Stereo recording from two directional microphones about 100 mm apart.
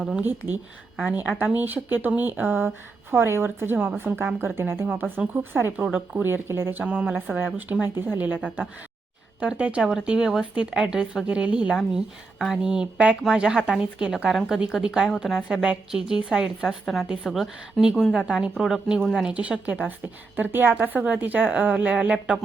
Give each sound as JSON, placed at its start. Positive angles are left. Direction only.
{"t": 0.2, "sound": "a woman's voice", "side_deg": -20}
{"t": 9.4, "sound": "speech", "side_deg": -10}
{"t": 19.3, "sound": "speech", "side_deg": -15}